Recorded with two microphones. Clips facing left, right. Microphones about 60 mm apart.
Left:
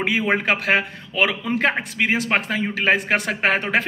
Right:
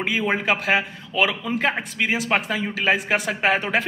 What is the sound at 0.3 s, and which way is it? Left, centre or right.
A man's voice, left.